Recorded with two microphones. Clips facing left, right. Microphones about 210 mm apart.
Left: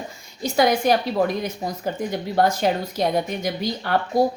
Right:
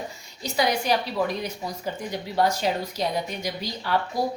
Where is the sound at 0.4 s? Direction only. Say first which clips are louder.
Left 6 dB; 50° left (ahead or behind).